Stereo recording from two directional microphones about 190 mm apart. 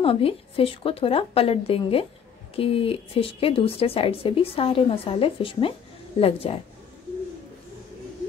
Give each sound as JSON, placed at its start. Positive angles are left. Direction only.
{"t": 0.0, "sound": "speech", "side_deg": 30}